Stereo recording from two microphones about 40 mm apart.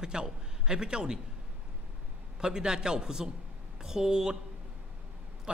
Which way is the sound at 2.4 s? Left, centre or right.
Centre.